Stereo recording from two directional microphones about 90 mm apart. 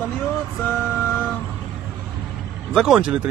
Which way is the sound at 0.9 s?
20° left (ahead or behind).